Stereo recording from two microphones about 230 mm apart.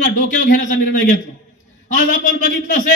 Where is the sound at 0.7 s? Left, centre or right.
Left.